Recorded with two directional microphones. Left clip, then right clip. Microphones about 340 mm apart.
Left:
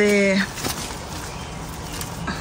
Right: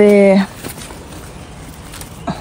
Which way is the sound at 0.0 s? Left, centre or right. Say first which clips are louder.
Right 9 dB; centre.